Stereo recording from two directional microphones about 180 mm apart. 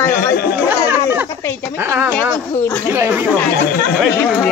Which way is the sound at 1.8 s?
10° right (ahead or behind).